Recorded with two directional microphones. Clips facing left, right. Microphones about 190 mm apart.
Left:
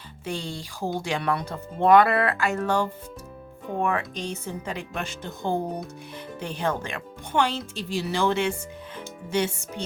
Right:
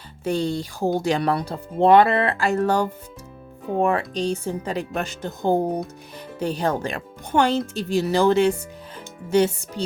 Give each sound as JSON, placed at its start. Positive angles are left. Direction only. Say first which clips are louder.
{"t": 0.3, "sound": "speech", "louder": "right 9 dB", "side_deg": -40}